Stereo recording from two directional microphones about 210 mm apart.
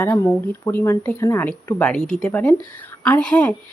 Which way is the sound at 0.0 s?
10° left (ahead or behind).